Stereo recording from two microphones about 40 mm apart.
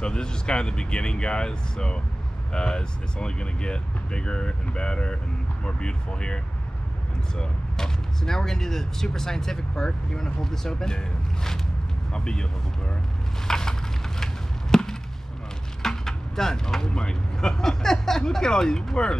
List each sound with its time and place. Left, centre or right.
0.0 s speech: left
7.3 s speech: centre
13.5 s a sound: centre
15.8 s speech: centre